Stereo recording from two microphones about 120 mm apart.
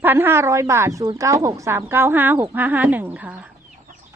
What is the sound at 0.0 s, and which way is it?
A woman's voice, 15° right (ahead or behind).